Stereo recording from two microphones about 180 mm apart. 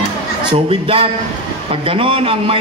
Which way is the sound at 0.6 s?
30° right (ahead or behind).